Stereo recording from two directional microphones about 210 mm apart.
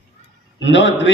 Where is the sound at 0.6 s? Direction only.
60° left (ahead or behind).